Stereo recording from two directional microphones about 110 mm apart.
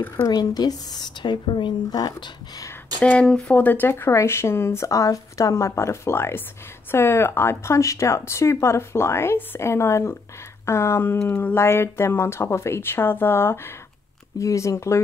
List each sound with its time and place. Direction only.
0.2 s speech: 35° left (ahead or behind)
3.0 s speech: 10° left (ahead or behind); by 15.0 s 25° left (ahead or behind)